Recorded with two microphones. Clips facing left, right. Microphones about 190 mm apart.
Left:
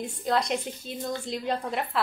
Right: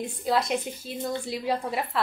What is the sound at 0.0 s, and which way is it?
A woman's voice, 5° right (ahead or behind).